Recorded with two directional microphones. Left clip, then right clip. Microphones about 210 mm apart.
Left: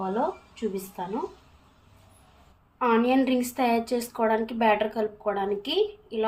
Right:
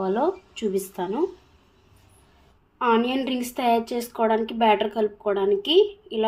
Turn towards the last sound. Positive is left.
turn(degrees=-25)  # may be behind; listen again after turning